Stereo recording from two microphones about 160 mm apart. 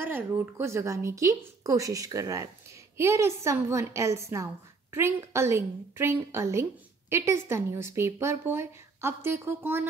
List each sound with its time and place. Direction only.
0.0 s a woman's voice: 15° right (ahead or behind)